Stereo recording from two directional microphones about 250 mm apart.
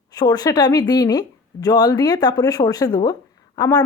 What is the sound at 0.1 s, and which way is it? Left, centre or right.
Speech, centre.